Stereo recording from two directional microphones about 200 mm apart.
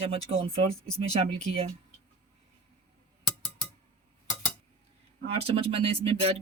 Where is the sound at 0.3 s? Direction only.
30° right (ahead or behind).